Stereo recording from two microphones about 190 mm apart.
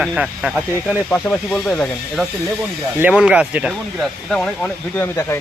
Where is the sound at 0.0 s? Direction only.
Centre (ahead or behind).